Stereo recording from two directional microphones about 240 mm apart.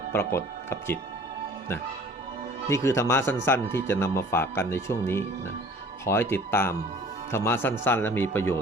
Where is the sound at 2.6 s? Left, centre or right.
Centre.